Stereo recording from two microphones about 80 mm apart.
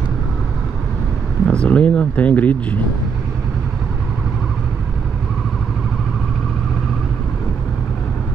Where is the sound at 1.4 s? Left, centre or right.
Centre.